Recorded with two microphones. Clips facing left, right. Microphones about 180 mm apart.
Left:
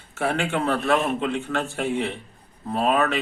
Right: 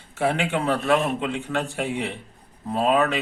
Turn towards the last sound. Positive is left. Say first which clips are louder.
# right 1 dB
turn(degrees=-15)  # may be behind; listen again after turning